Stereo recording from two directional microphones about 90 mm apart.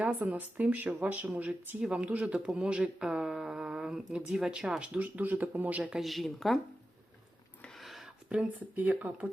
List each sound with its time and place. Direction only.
0.0 s speech: 15° right (ahead or behind)
6.0 s speech: centre (ahead or behind)
7.6 s a sound: centre (ahead or behind)
8.3 s speech: 15° right (ahead or behind)